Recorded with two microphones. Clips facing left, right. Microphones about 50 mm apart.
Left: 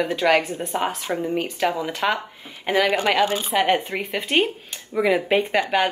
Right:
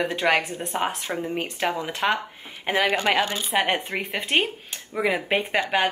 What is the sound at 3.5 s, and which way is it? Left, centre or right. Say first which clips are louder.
Speech: even; centre.